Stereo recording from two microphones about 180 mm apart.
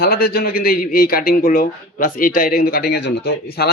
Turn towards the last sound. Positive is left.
turn(degrees=65)  # may be behind; listen again after turning